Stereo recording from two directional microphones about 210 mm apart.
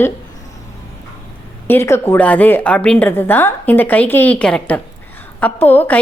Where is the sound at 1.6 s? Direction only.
10° left (ahead or behind).